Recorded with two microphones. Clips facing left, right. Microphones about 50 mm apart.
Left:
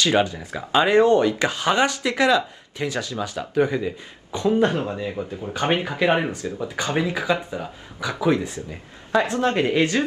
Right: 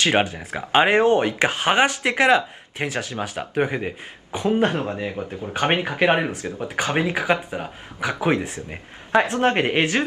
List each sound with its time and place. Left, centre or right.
0.0 s speech: right